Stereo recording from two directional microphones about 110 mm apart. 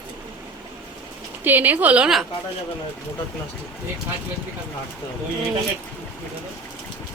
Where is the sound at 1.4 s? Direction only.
15° right (ahead or behind).